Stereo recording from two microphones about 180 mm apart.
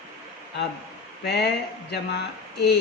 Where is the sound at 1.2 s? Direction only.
65° left (ahead or behind).